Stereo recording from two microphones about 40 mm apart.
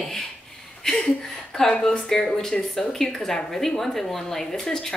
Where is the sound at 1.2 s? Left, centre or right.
Centre.